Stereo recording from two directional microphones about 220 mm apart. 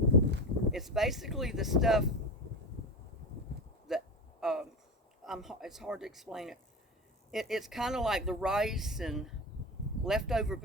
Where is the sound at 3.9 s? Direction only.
Centre (ahead or behind).